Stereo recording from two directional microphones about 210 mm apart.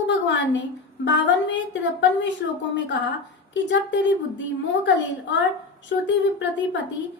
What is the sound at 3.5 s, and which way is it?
Speech, 60° left (ahead or behind).